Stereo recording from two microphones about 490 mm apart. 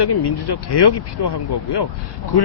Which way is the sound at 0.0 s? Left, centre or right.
Left.